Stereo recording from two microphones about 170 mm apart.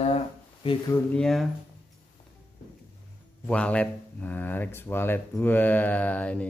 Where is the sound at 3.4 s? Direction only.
5° left (ahead or behind).